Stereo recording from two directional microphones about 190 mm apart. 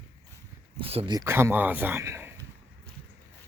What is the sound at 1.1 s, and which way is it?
Speech, 15° right (ahead or behind).